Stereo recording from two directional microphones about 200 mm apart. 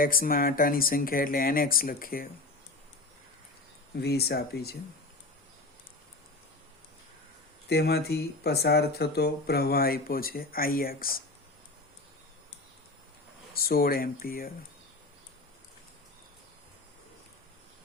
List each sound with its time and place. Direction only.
0.0 s speech: 45° left (ahead or behind)
4.0 s speech: 50° left (ahead or behind)
7.7 s speech: 55° left (ahead or behind)
13.5 s speech: 50° left (ahead or behind)